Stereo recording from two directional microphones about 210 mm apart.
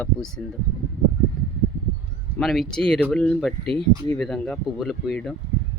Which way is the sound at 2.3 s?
Centre (ahead or behind).